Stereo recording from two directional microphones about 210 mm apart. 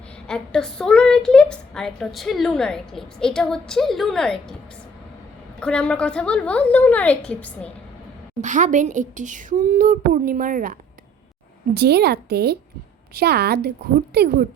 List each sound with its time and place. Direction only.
0.3 s a woman's voice: 5° left (ahead or behind)
5.5 s a woman's voice: 5° left (ahead or behind)
8.4 s a woman's voice: 35° right (ahead or behind)